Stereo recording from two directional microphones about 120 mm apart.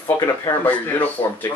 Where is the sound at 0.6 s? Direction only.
15° left (ahead or behind).